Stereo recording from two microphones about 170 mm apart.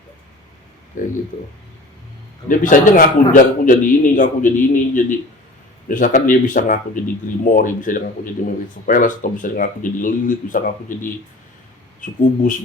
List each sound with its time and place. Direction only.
0.9 s a man's voice: 50° left (ahead or behind)
1.3 s speech: 60° left (ahead or behind)
2.5 s a man's voice: 50° left (ahead or behind)